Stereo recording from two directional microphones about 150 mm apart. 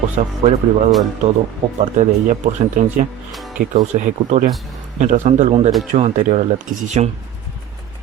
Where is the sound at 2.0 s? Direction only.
55° right (ahead or behind).